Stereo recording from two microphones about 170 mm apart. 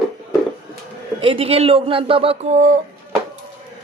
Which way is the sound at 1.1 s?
30° right (ahead or behind).